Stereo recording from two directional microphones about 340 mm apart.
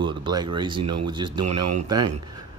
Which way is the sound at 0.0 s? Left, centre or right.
Centre.